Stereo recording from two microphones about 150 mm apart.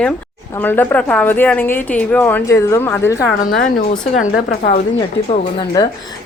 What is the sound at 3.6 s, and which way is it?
Speech, 60° left (ahead or behind).